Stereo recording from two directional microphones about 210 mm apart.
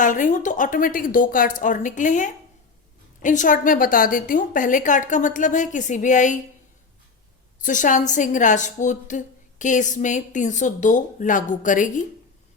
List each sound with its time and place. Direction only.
0.0 s a woman's voice: 40° left (ahead or behind)
7.6 s a woman's voice: 40° left (ahead or behind)